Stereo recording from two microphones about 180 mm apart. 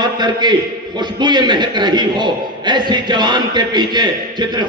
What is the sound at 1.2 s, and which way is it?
A man's voice, 25° right (ahead or behind).